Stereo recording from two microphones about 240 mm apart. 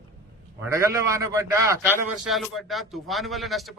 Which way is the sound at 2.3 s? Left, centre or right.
Centre.